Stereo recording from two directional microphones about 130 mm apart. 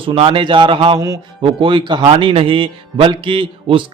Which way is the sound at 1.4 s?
40° right (ahead or behind).